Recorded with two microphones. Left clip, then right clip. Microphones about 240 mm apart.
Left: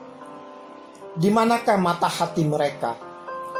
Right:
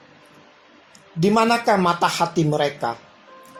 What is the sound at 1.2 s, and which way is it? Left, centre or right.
Speech, right.